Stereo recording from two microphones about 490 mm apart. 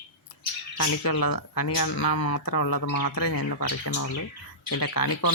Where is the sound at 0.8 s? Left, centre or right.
Left.